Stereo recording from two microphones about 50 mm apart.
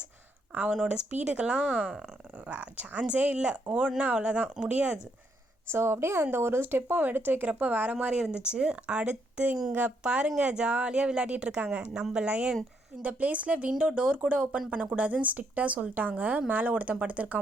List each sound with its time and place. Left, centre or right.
0.7 s speech: centre
5.7 s a woman's voice: right
6.9 s speech: right
7.2 s speech: right